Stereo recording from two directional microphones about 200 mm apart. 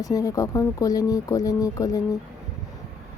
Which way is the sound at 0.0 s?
20° left (ahead or behind).